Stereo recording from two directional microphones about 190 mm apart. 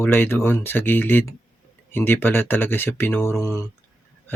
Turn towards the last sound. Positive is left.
turn(degrees=15)  # may be behind; listen again after turning